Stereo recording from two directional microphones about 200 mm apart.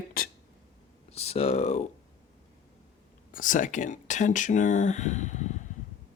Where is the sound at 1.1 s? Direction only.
30° left (ahead or behind).